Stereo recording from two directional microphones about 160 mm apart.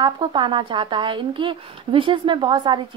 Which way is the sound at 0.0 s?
30° right (ahead or behind).